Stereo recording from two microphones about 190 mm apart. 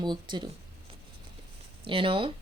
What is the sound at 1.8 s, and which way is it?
Speech, 30° right (ahead or behind).